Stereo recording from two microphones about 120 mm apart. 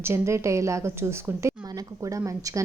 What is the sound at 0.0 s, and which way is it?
A woman's voice, 20° right (ahead or behind).